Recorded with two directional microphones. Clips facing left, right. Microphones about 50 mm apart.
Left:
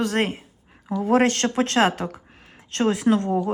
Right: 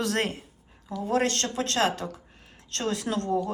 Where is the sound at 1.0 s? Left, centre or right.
Left.